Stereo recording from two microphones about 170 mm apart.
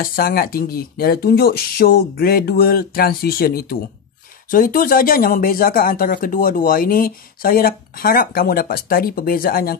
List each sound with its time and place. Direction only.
0.0 s speech: 60° left (ahead or behind)